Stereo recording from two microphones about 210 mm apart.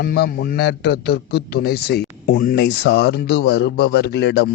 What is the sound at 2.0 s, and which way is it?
Speech, 40° left (ahead or behind).